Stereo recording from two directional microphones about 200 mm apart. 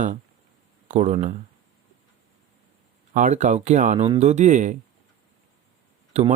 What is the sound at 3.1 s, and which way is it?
Speech, 40° right (ahead or behind).